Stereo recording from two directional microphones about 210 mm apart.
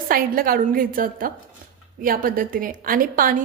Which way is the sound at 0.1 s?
45° right (ahead or behind).